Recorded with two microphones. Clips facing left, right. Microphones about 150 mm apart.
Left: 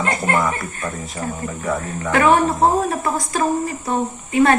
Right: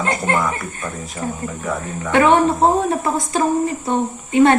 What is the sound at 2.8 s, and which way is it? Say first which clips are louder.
A woman's voice: right 2 dB; 25° right (ahead or behind).